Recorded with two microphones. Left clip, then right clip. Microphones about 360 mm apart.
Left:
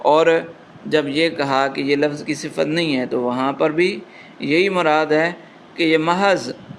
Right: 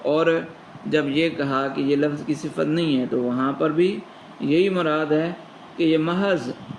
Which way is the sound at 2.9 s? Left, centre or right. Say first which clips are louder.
Left 3 dB; left.